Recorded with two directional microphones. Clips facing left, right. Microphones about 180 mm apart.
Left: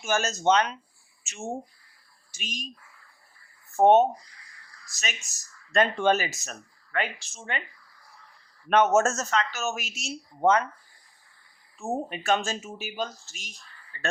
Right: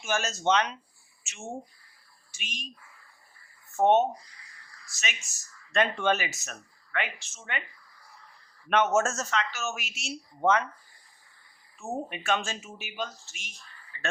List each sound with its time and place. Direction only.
0.0 s speech: 45° left (ahead or behind)
3.8 s speech: 40° left (ahead or behind)
5.7 s speech: 40° left (ahead or behind)
8.7 s speech: 40° left (ahead or behind)
11.8 s speech: 35° left (ahead or behind)
13.9 s a sound: 45° left (ahead or behind)